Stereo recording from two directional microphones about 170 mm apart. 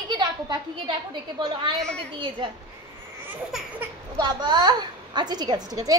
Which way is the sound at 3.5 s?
Centre (ahead or behind).